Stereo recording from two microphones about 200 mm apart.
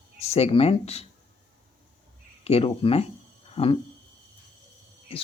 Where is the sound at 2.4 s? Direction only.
30° left (ahead or behind).